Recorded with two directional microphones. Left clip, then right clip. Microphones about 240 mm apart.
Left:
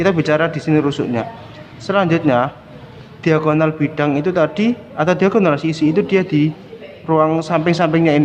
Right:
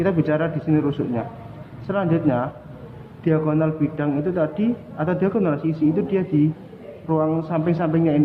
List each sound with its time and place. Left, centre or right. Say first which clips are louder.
0.0 s a man's voice: left 6 dB; left